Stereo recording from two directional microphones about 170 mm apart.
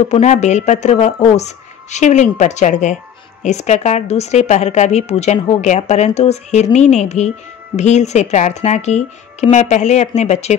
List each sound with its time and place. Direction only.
0.1 s speech: 45° left (ahead or behind)